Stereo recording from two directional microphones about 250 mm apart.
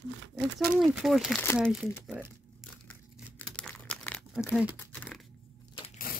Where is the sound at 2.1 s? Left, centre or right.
Centre.